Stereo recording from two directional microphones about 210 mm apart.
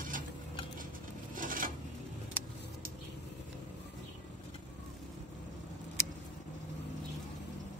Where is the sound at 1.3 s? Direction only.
40° right (ahead or behind).